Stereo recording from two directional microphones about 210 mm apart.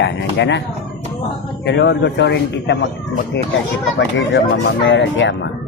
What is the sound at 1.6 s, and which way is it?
Speech, 55° left (ahead or behind).